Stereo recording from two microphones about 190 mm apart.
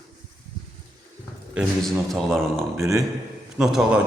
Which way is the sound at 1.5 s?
Centre (ahead or behind).